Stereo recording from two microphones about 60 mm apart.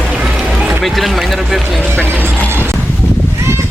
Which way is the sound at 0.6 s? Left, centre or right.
Centre.